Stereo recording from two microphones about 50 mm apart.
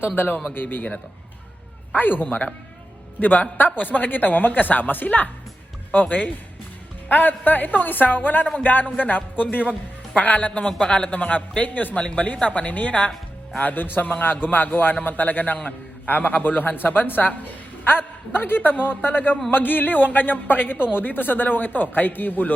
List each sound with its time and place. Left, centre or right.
0.5 s a man's voice: left
2.0 s a man's voice: left
18.3 s a woman's voice: left